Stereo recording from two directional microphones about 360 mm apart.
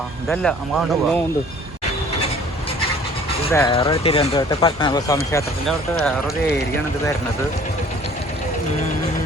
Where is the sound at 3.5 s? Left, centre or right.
Centre.